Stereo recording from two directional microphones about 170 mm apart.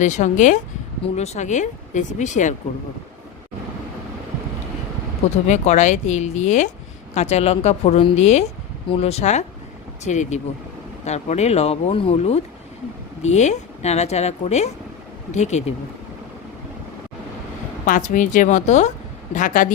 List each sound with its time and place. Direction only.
0.0 s speech: 45° left (ahead or behind)
5.5 s speech: 45° left (ahead or behind)
17.8 s speech: 50° left (ahead or behind)